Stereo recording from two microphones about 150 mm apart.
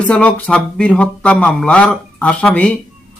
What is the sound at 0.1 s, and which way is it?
Speech, 5° left (ahead or behind).